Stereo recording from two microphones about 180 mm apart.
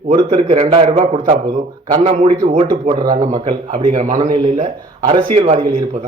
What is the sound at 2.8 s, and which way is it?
Speech, 20° right (ahead or behind).